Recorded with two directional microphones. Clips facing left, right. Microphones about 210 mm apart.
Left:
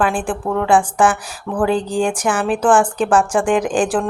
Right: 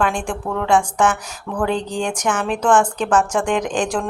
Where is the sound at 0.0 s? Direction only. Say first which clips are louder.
Left 3 dB; 5° left (ahead or behind).